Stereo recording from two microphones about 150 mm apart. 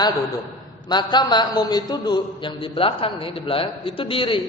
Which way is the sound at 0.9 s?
30° left (ahead or behind).